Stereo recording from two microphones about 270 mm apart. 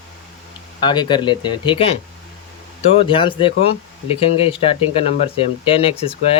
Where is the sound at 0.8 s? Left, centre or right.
Centre.